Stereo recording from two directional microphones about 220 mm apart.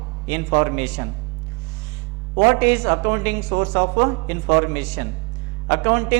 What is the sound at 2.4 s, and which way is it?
A man's voice, 15° right (ahead or behind).